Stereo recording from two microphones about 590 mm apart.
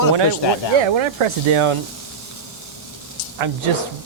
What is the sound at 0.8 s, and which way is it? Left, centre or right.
Speech, right.